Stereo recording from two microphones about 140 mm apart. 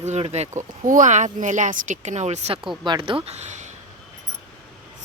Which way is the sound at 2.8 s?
35° right (ahead or behind).